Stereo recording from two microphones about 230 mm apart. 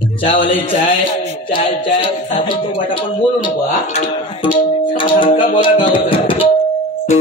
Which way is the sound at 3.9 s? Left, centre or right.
Left.